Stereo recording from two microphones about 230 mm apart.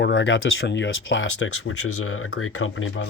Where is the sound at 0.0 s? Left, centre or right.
Left.